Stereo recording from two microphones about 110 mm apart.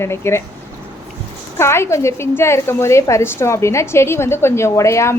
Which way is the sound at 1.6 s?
25° left (ahead or behind).